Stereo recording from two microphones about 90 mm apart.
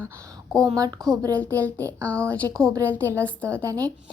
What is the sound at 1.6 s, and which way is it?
Speech, 20° left (ahead or behind).